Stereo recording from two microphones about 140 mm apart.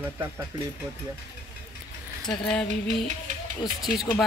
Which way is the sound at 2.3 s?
5° left (ahead or behind).